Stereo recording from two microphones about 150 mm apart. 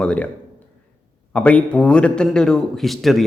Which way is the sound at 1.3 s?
10° left (ahead or behind).